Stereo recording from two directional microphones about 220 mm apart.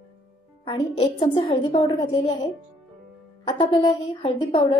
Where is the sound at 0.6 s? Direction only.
20° left (ahead or behind).